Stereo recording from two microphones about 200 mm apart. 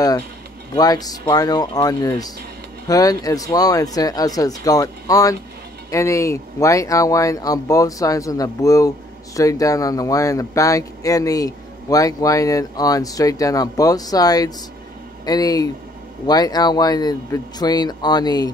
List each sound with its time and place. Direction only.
0.7 s speech: 20° left (ahead or behind)